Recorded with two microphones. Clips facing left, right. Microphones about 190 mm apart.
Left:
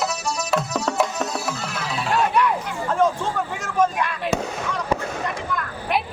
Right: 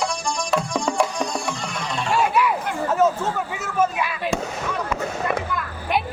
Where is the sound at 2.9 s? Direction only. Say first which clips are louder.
Even; 5° right (ahead or behind).